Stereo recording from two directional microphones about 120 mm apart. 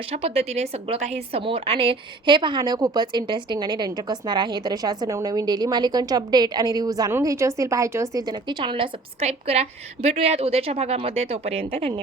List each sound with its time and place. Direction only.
0.1 s a woman's voice: 55° right (ahead or behind)
1.4 s a woman's voice: 50° right (ahead or behind)
9.2 s a woman's voice: 55° right (ahead or behind)